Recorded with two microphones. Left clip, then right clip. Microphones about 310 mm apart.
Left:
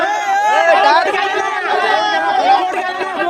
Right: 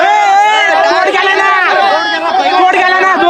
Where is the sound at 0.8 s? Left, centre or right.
Centre.